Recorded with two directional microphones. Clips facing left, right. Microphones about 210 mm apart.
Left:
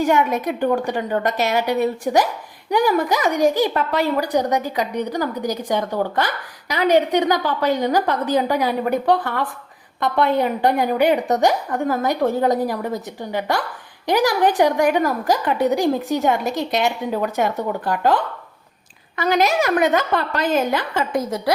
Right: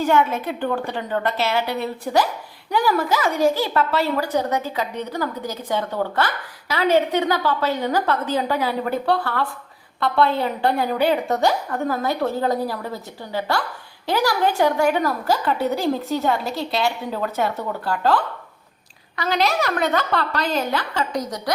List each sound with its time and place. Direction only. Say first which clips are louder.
0.0 s a woman's voice: left 1 dB; 15° left (ahead or behind)
19.3 s a woman's voice: left 4 dB; 15° left (ahead or behind)
20.9 s a woman's voice: left 3 dB; 50° left (ahead or behind)
21.2 s a woman's voice: left 5 dB; 25° left (ahead or behind)